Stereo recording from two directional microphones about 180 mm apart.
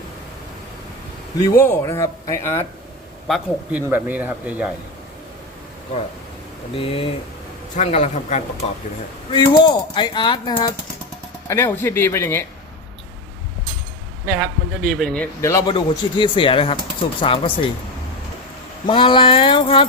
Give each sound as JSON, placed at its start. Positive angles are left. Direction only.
{"t": 1.4, "sound": "a man's voice", "side_deg": 15}
{"t": 3.2, "sound": "a man's voice", "side_deg": -5}
{"t": 6.7, "sound": "speech", "side_deg": 30}
{"t": 9.3, "sound": "speech", "side_deg": 25}
{"t": 11.4, "sound": "a man's voice", "side_deg": 15}
{"t": 14.3, "sound": "a man's voice", "side_deg": 0}
{"t": 15.4, "sound": "a man's voice", "side_deg": 15}
{"t": 15.7, "sound": "speech", "side_deg": 30}
{"t": 18.9, "sound": "speech", "side_deg": 30}